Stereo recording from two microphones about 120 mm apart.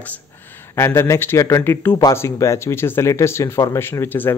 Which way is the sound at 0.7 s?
20° left (ahead or behind).